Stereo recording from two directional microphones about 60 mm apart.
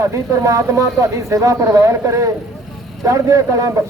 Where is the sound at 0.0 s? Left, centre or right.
Right.